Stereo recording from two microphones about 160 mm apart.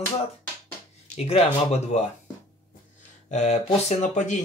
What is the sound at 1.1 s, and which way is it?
Speech, 40° left (ahead or behind).